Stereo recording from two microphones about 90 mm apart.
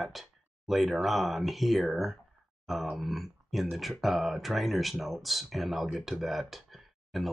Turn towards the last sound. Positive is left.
turn(degrees=0)  # may be behind; listen again after turning